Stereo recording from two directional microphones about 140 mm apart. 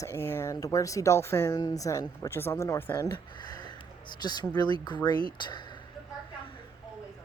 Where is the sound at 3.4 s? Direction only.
30° left (ahead or behind).